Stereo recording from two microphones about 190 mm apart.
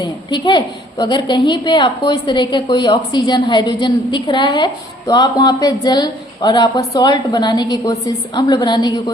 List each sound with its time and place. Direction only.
0.0 s a woman's voice: 25° left (ahead or behind)